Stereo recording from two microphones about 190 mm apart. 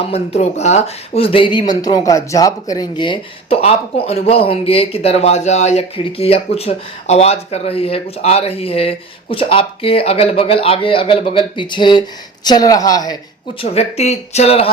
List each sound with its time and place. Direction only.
0.0 s speech: 35° left (ahead or behind)
13.6 s speech: 35° left (ahead or behind)